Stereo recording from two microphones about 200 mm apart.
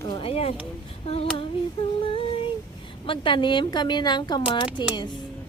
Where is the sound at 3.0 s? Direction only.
25° left (ahead or behind).